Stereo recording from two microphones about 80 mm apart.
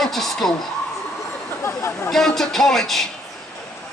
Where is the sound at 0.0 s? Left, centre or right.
Centre.